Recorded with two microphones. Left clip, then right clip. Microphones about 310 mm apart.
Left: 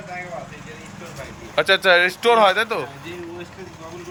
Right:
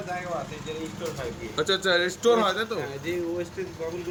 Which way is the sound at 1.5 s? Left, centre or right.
Centre.